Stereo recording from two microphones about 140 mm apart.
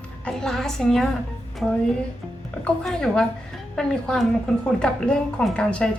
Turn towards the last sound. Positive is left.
turn(degrees=5)  # may be behind; listen again after turning